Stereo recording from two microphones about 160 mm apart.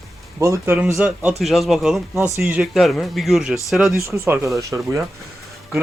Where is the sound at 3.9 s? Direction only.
15° right (ahead or behind).